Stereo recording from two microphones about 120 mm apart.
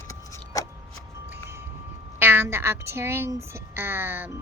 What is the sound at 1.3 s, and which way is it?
Wind chime, 20° right (ahead or behind).